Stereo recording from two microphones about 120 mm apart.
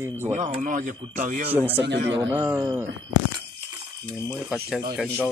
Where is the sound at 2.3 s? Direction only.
15° right (ahead or behind).